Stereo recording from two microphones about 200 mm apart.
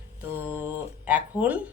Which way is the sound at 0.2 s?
10° right (ahead or behind).